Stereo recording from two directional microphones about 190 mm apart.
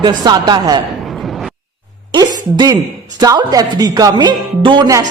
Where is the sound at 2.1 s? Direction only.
20° right (ahead or behind).